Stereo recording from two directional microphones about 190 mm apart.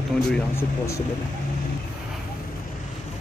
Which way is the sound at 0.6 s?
15° left (ahead or behind).